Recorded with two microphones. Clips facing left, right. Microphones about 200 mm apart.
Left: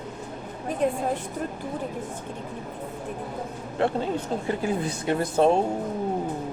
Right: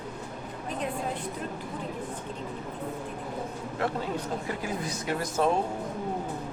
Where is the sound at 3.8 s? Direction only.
30° left (ahead or behind).